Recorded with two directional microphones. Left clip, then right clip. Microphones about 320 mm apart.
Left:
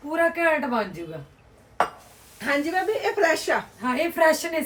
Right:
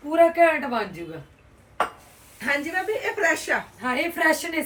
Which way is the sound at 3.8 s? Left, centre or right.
Centre.